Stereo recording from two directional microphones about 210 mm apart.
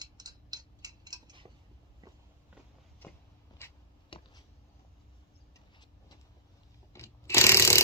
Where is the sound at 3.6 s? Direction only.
10° left (ahead or behind).